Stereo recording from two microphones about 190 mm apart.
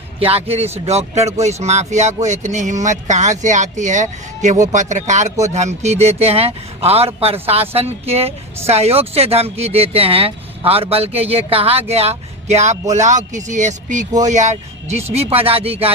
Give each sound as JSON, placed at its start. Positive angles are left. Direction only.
{"t": 0.2, "sound": "speech", "side_deg": -30}